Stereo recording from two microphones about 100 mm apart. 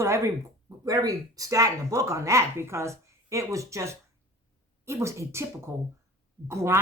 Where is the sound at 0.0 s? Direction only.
30° right (ahead or behind).